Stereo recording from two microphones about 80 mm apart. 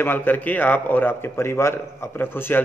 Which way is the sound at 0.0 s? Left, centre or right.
Left.